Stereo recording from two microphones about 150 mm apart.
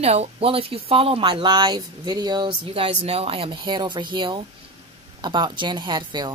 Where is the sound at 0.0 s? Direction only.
45° right (ahead or behind).